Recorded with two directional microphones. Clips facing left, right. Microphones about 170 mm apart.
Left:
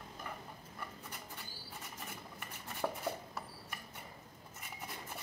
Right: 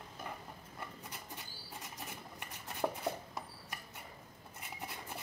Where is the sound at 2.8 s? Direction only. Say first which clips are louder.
Right 2 dB; 10° right (ahead or behind).